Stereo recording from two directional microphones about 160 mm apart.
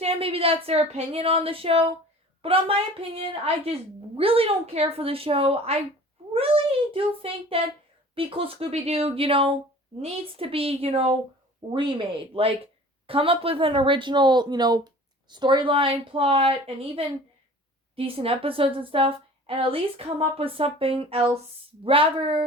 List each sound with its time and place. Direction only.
0.0 s a child's voice: 35° right (ahead or behind)